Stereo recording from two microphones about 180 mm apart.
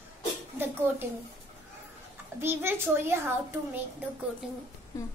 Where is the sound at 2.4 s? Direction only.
15° right (ahead or behind).